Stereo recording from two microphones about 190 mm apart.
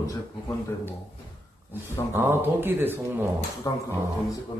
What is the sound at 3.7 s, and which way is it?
Speech, 20° left (ahead or behind).